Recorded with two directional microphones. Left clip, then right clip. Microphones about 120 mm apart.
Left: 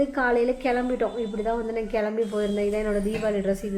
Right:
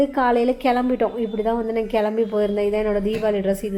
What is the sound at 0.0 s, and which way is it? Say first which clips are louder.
A woman's voice: right 4 dB; 35° right (ahead or behind).